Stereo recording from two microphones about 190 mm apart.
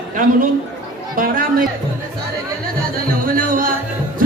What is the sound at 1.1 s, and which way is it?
Speech, 50° right (ahead or behind).